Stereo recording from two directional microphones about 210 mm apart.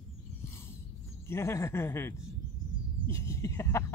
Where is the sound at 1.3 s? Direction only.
10° left (ahead or behind).